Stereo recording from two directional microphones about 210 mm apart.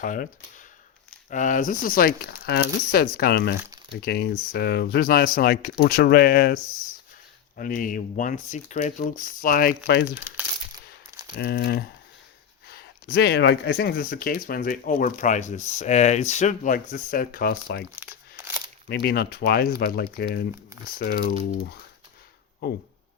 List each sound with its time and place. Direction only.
0.0 s speech: 40° left (ahead or behind)
1.3 s speech: 35° left (ahead or behind)
11.3 s speech: 50° left (ahead or behind)
18.0 s crumpling: 10° right (ahead or behind)
18.9 s speech: 50° left (ahead or behind)